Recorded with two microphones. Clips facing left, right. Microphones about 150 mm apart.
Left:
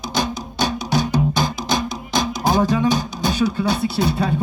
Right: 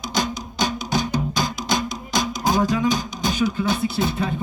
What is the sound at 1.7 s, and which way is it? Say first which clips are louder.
Music: left 2 dB; 20° right (ahead or behind).